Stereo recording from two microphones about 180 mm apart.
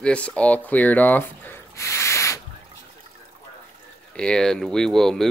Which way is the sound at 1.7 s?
15° left (ahead or behind).